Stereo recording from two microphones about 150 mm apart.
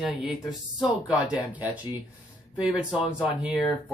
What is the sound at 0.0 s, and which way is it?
Speech, 5° right (ahead or behind).